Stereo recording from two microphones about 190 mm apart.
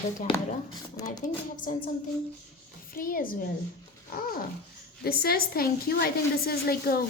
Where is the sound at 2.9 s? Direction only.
50° left (ahead or behind).